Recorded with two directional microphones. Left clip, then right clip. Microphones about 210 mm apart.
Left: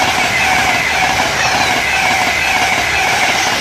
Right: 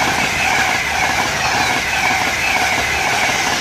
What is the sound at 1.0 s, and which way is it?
Train, 45° left (ahead or behind).